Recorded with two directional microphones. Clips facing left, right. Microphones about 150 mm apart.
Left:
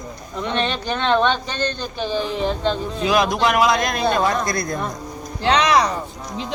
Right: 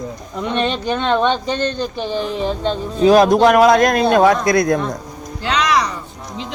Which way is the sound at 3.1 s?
40° right (ahead or behind).